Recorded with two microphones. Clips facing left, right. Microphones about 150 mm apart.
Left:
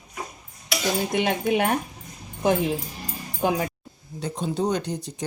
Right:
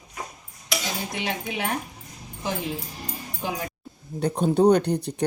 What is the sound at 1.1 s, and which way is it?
Speech, 50° left (ahead or behind).